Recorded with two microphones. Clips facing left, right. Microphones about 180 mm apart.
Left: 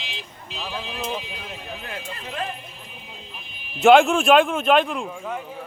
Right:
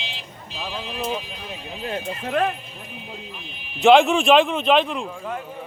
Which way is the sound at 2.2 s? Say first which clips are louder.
Right 10 dB; 60° right (ahead or behind).